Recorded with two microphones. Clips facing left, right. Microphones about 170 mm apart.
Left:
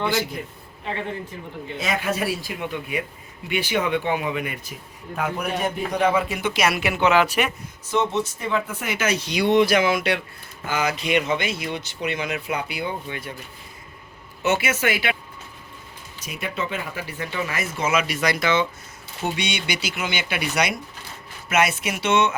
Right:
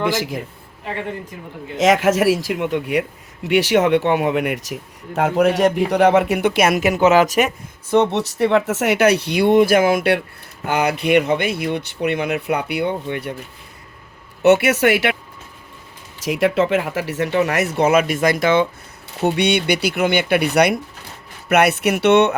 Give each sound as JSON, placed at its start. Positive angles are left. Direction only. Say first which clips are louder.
{"t": 0.0, "sound": "speech", "louder": "right 3 dB", "side_deg": -90}
{"t": 1.7, "sound": "speech", "louder": "right 11 dB", "side_deg": -90}
{"t": 7.9, "sound": "speech", "louder": "right 6 dB", "side_deg": -65}
{"t": 10.7, "sound": "speech", "louder": "right 6 dB", "side_deg": -65}
{"t": 14.4, "sound": "speech", "louder": "right 9 dB", "side_deg": -65}
{"t": 16.2, "sound": "speech", "louder": "right 12 dB", "side_deg": -90}
{"t": 19.2, "sound": "speech", "louder": "right 10 dB", "side_deg": -60}